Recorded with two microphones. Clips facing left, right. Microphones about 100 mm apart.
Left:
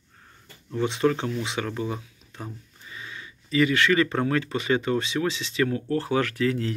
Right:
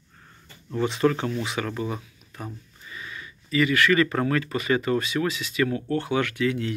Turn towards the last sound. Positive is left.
turn(degrees=35)  # may be behind; listen again after turning